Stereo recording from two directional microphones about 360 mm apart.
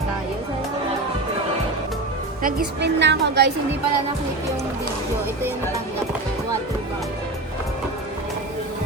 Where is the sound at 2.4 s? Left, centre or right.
Right.